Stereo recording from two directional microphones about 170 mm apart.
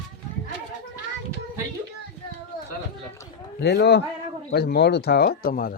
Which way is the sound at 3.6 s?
90° left.